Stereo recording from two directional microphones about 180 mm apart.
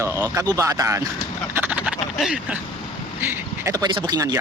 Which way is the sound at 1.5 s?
10° right (ahead or behind).